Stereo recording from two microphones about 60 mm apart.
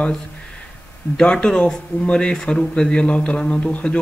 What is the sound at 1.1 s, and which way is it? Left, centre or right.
Speech, centre.